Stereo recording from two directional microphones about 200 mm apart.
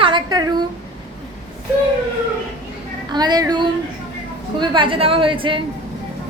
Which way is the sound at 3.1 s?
20° right (ahead or behind).